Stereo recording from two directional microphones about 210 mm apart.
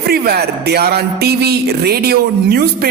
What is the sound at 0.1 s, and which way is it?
Speech, 50° right (ahead or behind).